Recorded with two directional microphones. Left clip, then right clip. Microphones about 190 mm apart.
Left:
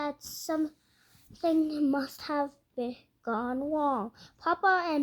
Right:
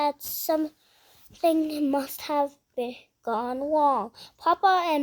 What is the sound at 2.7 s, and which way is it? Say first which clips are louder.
Speech: right 3 dB; 65° right (ahead or behind).